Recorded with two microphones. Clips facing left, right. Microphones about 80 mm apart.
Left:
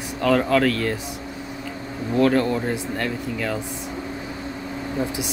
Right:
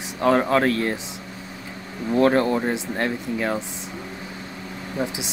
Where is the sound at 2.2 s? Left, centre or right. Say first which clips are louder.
Right 1 dB; right.